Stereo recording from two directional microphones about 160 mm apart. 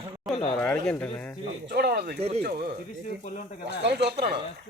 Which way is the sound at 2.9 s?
55° left (ahead or behind).